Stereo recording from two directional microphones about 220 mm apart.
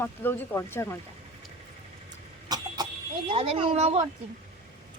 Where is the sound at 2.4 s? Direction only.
15° right (ahead or behind).